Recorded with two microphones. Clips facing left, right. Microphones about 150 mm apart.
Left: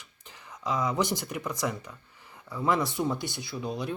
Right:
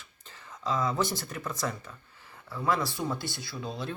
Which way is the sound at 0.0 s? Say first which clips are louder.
Left 1 dB; 15° left (ahead or behind).